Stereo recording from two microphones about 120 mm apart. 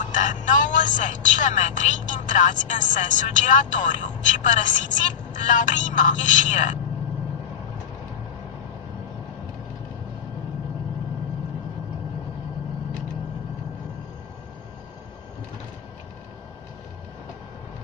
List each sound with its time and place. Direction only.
0.0 s a woman's voice: 90° left